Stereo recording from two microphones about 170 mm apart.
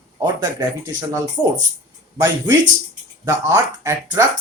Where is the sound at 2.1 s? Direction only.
20° right (ahead or behind).